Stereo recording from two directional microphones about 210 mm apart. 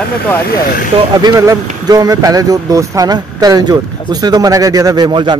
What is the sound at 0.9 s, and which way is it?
Speech, 25° right (ahead or behind).